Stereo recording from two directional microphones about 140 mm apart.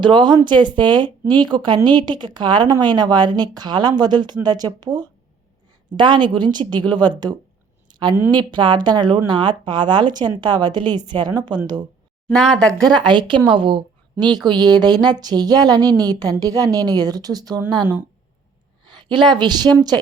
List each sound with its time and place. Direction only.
0.0 s a woman's voice: 35° right (ahead or behind)
7.9 s a sound: 30° right (ahead or behind)
8.3 s speech: 35° right (ahead or behind)
12.3 s speech: 5° left (ahead or behind)
12.9 s a woman's voice: 35° right (ahead or behind)
18.9 s a woman's voice: 35° right (ahead or behind)